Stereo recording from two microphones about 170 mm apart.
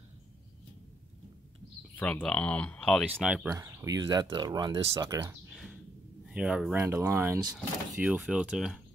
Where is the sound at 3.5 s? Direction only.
15° right (ahead or behind).